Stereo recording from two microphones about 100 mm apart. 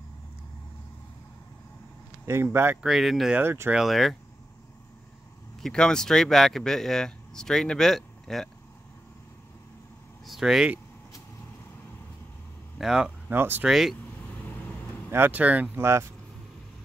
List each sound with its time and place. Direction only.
2.2 s speech: 25° right (ahead or behind)
2.8 s speech: centre (ahead or behind)
3.3 s speech: 20° right (ahead or behind)
3.7 s speech: centre (ahead or behind)
5.6 s speech: 5° left (ahead or behind)
10.2 s speech: 5° right (ahead or behind)
12.7 s speech: 5° right (ahead or behind)
13.3 s speech: 20° right (ahead or behind)
13.7 s speech: 5° right (ahead or behind)
15.0 s speech: 20° right (ahead or behind)
15.8 s speech: 25° right (ahead or behind)